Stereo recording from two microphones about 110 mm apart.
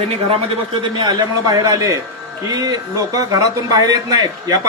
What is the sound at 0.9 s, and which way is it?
Speech, 40° right (ahead or behind).